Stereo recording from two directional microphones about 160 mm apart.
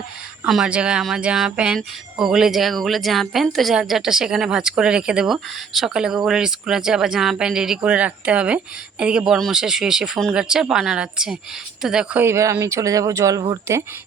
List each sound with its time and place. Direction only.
0.4 s speech: 5° right (ahead or behind)
12.2 s speech: 20° right (ahead or behind)